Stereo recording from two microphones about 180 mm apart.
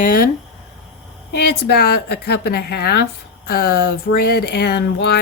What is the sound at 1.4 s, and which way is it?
Speech, 60° left (ahead or behind).